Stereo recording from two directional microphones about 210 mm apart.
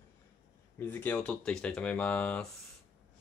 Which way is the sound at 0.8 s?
10° left (ahead or behind).